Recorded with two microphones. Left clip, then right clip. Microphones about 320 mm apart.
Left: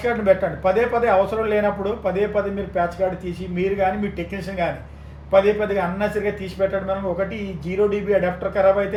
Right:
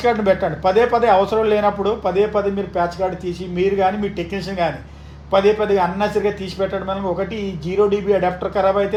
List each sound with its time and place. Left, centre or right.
0.0 s a man's voice: right
5.3 s a man's voice: right
7.9 s a man's voice: right